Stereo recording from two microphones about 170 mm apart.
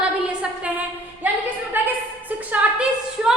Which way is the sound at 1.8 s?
10° right (ahead or behind).